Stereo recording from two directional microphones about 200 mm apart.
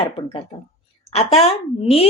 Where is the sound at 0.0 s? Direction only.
25° left (ahead or behind).